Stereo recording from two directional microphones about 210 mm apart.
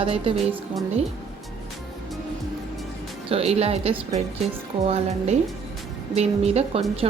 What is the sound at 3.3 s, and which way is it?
Speech, 30° right (ahead or behind).